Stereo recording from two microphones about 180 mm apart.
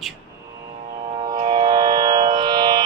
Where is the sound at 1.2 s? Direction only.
25° right (ahead or behind).